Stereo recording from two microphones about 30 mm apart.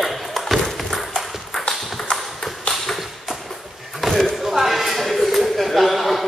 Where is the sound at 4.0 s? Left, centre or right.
Centre.